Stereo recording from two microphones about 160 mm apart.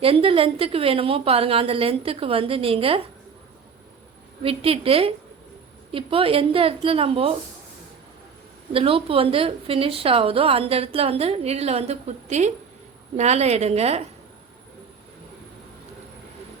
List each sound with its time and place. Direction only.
0.0 s a woman's voice: 35° right (ahead or behind)
4.4 s a woman's voice: 35° right (ahead or behind)
8.7 s a woman's voice: 35° right (ahead or behind)